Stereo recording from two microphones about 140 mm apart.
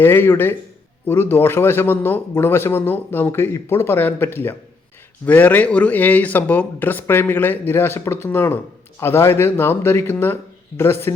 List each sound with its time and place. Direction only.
0.0 s a man's voice: 15° left (ahead or behind)